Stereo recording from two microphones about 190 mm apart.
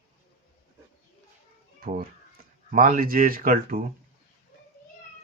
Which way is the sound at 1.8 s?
45° right (ahead or behind).